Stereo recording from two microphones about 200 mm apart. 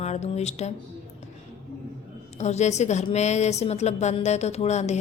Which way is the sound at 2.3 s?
35° left (ahead or behind).